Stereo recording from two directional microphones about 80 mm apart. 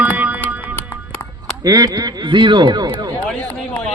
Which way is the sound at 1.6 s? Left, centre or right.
Right.